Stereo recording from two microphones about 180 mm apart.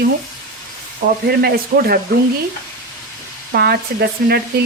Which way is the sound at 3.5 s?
60° right (ahead or behind).